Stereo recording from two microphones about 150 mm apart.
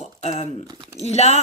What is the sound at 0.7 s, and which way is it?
Speech, 25° right (ahead or behind).